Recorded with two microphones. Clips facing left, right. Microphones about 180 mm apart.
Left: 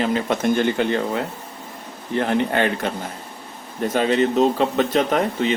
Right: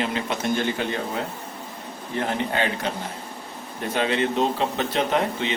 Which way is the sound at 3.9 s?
40° left (ahead or behind).